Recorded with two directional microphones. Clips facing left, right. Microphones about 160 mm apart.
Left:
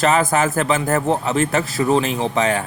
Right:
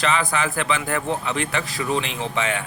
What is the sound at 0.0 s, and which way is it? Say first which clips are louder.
A man's voice: left 6 dB; 45° left (ahead or behind).